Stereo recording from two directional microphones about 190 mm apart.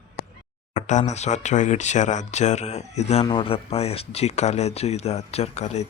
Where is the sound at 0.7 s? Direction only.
40° left (ahead or behind).